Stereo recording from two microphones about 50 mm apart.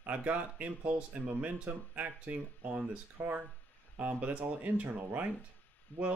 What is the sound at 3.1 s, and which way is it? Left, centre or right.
Speech, right.